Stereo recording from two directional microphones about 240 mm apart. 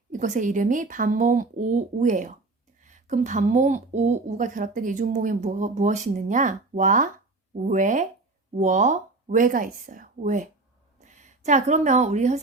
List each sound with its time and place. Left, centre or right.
0.1 s a woman's voice: right